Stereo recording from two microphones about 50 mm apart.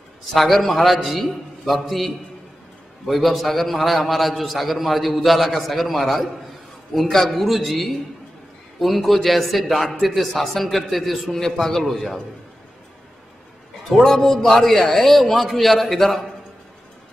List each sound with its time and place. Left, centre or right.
0.3 s a man's voice: centre
14.0 s a man's voice: centre
14.4 s a man's voice: centre